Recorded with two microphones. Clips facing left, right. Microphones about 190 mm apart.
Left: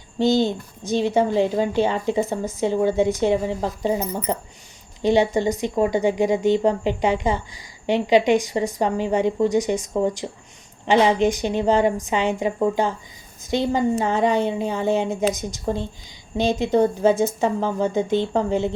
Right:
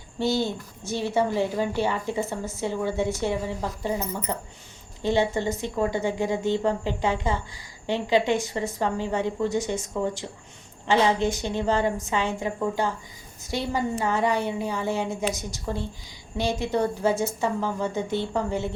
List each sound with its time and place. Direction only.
0.2 s a woman's voice: 20° left (ahead or behind)